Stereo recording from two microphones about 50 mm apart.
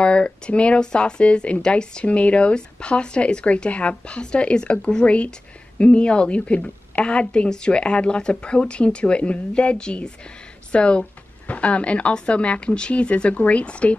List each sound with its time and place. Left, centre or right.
0.0 s speech: left